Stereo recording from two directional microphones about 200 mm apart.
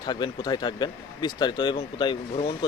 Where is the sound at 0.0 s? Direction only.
20° left (ahead or behind).